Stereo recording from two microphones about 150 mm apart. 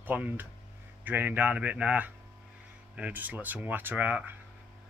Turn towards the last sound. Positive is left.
turn(degrees=-10)  # may be behind; listen again after turning